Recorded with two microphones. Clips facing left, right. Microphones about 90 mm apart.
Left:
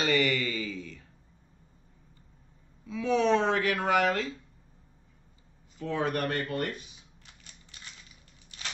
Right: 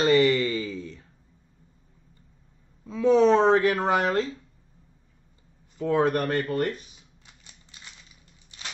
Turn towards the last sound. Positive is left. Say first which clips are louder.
# right 6 dB
turn(degrees=-35)  # may be behind; listen again after turning